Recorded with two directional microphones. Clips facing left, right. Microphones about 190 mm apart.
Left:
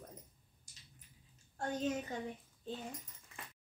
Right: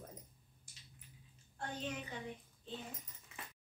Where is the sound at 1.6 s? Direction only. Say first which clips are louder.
Left 7 dB; 40° left (ahead or behind).